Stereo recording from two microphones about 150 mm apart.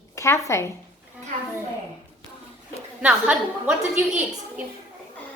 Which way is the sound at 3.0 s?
10° right (ahead or behind).